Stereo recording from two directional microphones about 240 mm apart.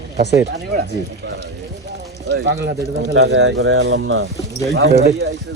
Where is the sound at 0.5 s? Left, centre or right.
Right.